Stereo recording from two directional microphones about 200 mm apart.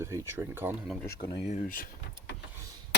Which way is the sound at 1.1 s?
20° left (ahead or behind).